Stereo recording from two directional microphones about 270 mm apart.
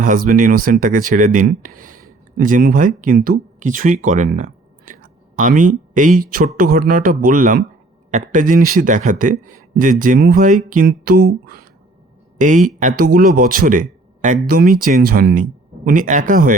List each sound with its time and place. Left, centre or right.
0.0 s speech: right